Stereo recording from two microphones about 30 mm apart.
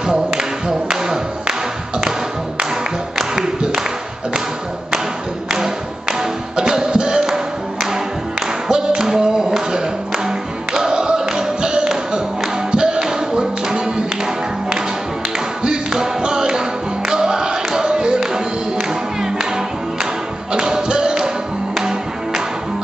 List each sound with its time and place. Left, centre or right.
0.3 s music: right
3.3 s a sound: centre
5.5 s a sound: centre
6.5 s music: right
6.8 s a sound: right
8.6 s music: right
15.6 s music: right
20.5 s music: right
21.7 s music: centre